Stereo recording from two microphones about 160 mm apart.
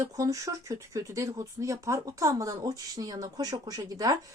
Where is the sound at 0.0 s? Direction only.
20° right (ahead or behind).